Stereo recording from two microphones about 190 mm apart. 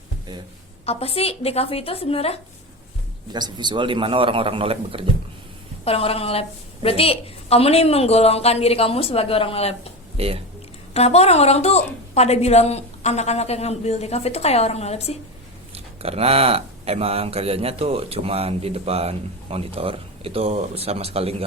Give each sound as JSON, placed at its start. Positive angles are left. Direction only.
{"t": 0.9, "sound": "a woman's voice", "side_deg": 30}
{"t": 3.3, "sound": "a man's voice", "side_deg": -25}
{"t": 5.8, "sound": "a woman's voice", "side_deg": 30}
{"t": 10.2, "sound": "speech", "side_deg": -30}
{"t": 10.9, "sound": "a woman's voice", "side_deg": 35}
{"t": 15.7, "sound": "speech", "side_deg": -30}